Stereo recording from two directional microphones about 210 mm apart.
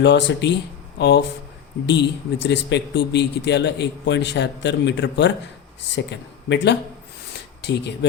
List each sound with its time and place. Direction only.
0.0 s a man's voice: 55° left (ahead or behind)